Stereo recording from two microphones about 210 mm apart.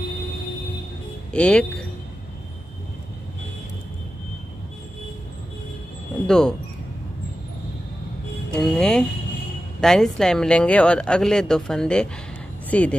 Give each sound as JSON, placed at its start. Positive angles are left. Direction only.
{"t": 1.3, "sound": "a woman's voice", "side_deg": 5}
{"t": 6.2, "sound": "speech", "side_deg": 5}
{"t": 8.5, "sound": "a woman's voice", "side_deg": 5}